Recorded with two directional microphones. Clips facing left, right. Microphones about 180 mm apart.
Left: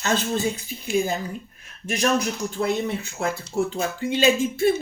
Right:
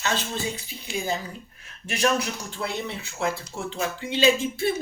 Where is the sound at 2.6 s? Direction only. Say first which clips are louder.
Left 7 dB; 45° left (ahead or behind).